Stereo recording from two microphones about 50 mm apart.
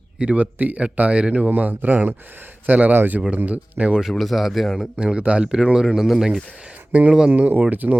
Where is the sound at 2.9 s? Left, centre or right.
Right.